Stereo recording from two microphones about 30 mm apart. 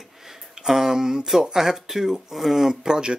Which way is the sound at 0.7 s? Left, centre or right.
Centre.